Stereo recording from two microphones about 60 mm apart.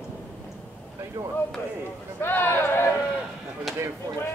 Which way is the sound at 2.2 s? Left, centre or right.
Left.